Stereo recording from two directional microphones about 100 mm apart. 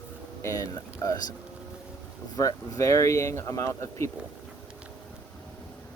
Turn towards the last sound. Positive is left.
turn(degrees=30)  # may be behind; listen again after turning